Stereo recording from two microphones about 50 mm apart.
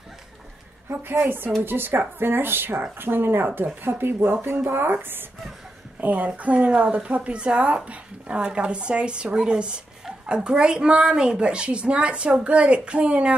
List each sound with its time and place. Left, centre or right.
0.8 s speech: right
1.2 s speech: right
5.9 s a woman's voice: right